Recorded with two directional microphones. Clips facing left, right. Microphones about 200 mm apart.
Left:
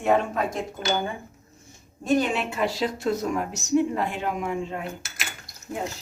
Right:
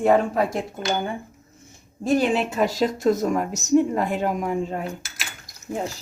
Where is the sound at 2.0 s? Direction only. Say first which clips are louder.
Right 3 dB; 30° right (ahead or behind).